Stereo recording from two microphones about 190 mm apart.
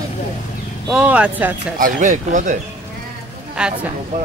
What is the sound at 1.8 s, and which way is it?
Speech, 45° right (ahead or behind).